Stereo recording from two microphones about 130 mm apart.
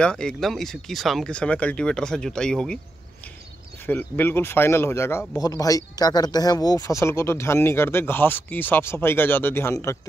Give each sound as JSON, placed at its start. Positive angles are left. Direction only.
{"t": 0.0, "sound": "speech", "side_deg": 5}
{"t": 3.8, "sound": "speech", "side_deg": 15}